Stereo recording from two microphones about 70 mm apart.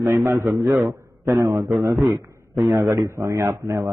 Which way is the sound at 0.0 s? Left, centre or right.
Right.